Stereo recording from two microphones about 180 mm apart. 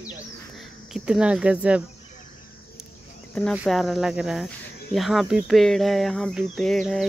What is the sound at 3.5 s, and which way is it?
Speech, centre (ahead or behind).